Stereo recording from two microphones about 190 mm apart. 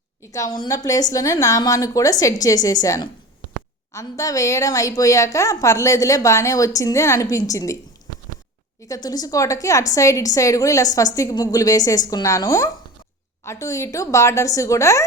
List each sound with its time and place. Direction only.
0.2 s a woman's voice: 15° left (ahead or behind)
8.9 s a woman's voice: 20° left (ahead or behind)